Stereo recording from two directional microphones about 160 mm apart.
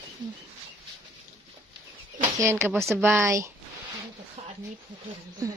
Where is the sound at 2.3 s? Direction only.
20° right (ahead or behind).